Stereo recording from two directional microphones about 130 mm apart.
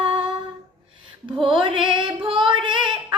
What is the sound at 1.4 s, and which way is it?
A woman's voice, 40° right (ahead or behind).